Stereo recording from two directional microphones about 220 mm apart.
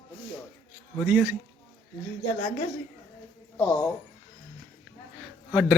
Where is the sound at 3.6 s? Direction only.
5° left (ahead or behind).